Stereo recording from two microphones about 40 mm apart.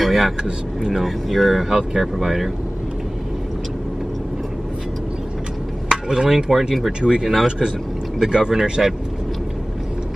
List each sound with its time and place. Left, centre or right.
0.0 s a sound: centre
1.0 s speech: centre
5.9 s speech: centre